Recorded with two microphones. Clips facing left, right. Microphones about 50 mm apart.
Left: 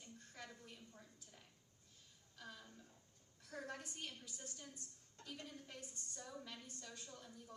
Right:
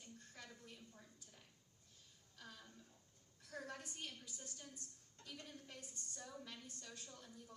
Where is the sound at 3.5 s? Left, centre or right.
Left.